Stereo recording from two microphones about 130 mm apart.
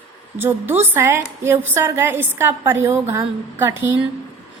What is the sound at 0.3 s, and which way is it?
A woman's voice, 15° right (ahead or behind).